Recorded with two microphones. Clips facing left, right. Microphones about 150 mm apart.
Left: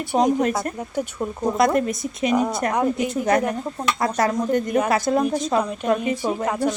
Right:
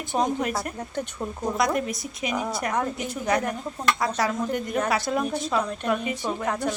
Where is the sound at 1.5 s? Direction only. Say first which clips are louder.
Left 6 dB; 50° left (ahead or behind).